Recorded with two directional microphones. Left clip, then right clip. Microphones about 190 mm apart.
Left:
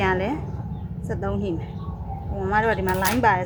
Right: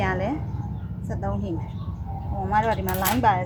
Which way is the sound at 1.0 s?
30° left (ahead or behind).